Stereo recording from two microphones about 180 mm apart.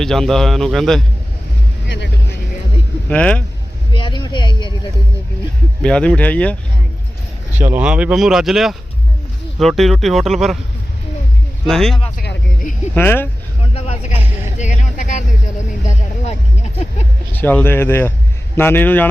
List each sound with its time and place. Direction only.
0.0 s speech: centre (ahead or behind)
1.9 s music: 70° left (ahead or behind)
3.1 s speech: 5° left (ahead or behind)
3.9 s a sound: 25° left (ahead or behind)
5.8 s speech: 5° left (ahead or behind)
7.6 s speech: 10° right (ahead or behind)
11.6 s speech: centre (ahead or behind)
12.1 s a sound: 55° left (ahead or behind)
12.9 s speech: 10° left (ahead or behind)
13.7 s a sound: 35° left (ahead or behind)
17.3 s speech: 10° left (ahead or behind)